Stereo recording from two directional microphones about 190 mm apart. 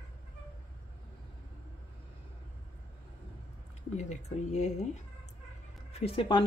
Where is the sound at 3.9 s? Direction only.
35° left (ahead or behind).